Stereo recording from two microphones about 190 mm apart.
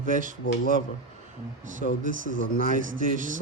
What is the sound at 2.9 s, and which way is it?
Speech, 45° right (ahead or behind).